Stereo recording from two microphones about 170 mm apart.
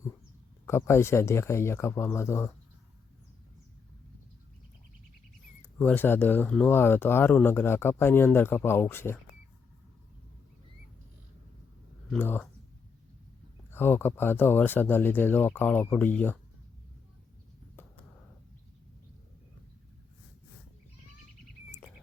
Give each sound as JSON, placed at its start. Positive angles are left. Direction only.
{"t": 0.6, "sound": "speech", "side_deg": 15}
{"t": 5.8, "sound": "speech", "side_deg": 10}
{"t": 12.1, "sound": "speech", "side_deg": 10}
{"t": 13.7, "sound": "speech", "side_deg": 10}